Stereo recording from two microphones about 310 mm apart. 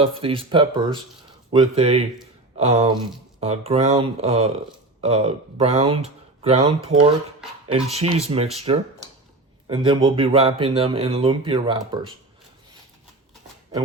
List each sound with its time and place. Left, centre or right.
0.0 s speech: centre